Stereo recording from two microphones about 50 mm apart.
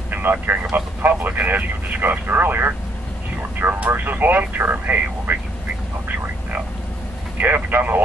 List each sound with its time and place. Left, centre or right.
0.1 s speech: right
3.9 s speech: right
7.3 s speech: right